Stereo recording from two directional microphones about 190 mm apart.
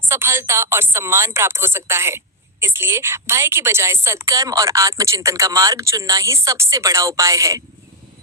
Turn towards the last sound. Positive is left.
turn(degrees=-15)  # may be behind; listen again after turning